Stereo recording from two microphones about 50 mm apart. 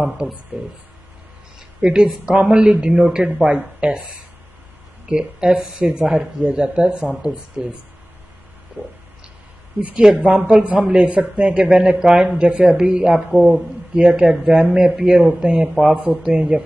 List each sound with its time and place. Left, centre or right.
0.0 s speech: right
1.8 s a woman's voice: centre
5.1 s a man's voice: centre
8.8 s a sound: right
10.2 s a man's voice: centre